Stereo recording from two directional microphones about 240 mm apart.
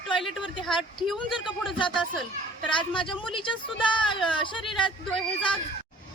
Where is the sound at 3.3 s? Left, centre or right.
Centre.